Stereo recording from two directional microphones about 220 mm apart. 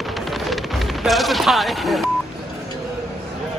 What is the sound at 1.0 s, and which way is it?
Speech, centre (ahead or behind).